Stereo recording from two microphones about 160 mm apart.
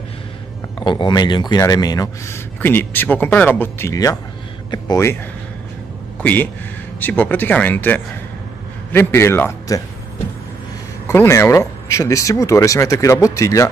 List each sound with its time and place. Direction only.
0.7 s speech: 30° left (ahead or behind)
6.2 s speech: 10° left (ahead or behind)
11.1 s speech: 15° left (ahead or behind)